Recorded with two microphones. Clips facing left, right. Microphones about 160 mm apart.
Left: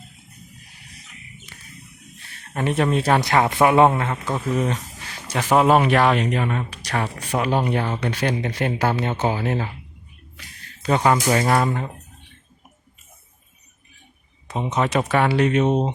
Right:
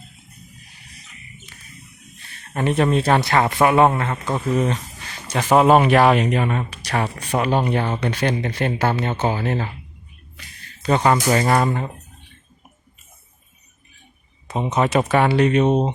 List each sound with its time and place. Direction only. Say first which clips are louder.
2.5 s speech: right 2 dB; centre (ahead or behind)
10.8 s speech: right 1 dB; 5° left (ahead or behind)
14.4 s speech: right 2 dB; 10° right (ahead or behind)